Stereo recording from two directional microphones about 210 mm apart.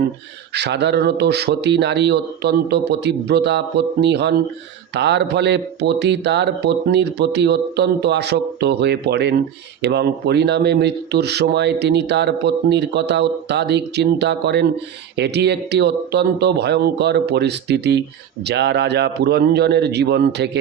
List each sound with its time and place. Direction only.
0.5 s speech: 55° right (ahead or behind)